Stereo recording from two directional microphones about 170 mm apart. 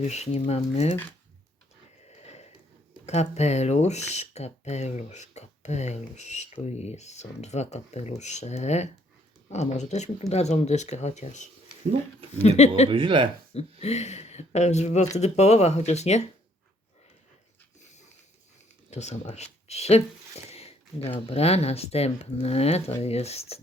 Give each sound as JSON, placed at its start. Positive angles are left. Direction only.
{"t": 0.0, "sound": "speech", "side_deg": 40}
{"t": 2.0, "sound": "a sound", "side_deg": 40}
{"t": 3.1, "sound": "speech", "side_deg": 40}
{"t": 12.9, "sound": "speech", "side_deg": -30}
{"t": 13.5, "sound": "speech", "side_deg": 40}
{"t": 18.9, "sound": "speech", "side_deg": 40}